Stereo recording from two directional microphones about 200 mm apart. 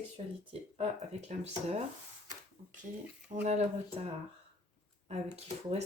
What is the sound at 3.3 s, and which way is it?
Speech, 30° right (ahead or behind).